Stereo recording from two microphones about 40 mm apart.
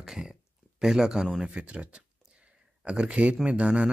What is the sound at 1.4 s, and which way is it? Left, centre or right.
Speech, centre.